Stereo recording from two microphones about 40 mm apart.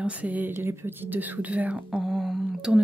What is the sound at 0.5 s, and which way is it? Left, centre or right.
Speech, right.